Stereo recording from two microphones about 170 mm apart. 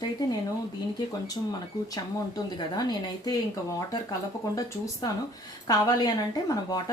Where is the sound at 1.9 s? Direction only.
20° left (ahead or behind).